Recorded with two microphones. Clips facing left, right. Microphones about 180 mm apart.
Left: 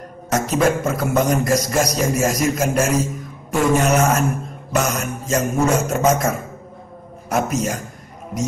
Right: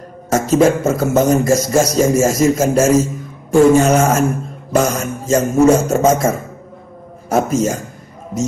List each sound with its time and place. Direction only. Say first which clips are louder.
0.3 s a man's voice: right 6 dB; 25° right (ahead or behind)